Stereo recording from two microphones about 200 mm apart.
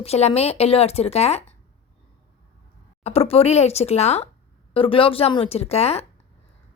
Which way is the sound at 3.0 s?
30° left (ahead or behind).